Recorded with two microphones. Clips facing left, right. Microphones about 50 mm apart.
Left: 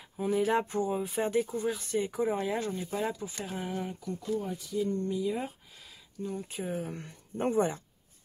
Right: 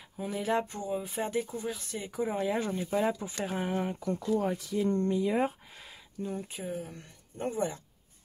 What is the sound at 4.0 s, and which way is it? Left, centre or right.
Speech, right.